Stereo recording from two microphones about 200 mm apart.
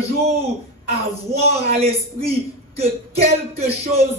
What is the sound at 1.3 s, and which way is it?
Speech, 30° right (ahead or behind).